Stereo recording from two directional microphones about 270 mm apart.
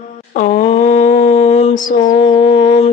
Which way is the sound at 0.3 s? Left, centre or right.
Left.